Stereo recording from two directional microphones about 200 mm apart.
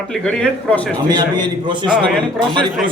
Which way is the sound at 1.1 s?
20° right (ahead or behind).